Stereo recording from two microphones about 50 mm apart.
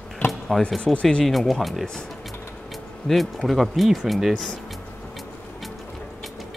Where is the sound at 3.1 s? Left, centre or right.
Centre.